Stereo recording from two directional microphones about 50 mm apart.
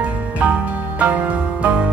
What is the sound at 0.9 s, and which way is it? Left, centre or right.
Music, right.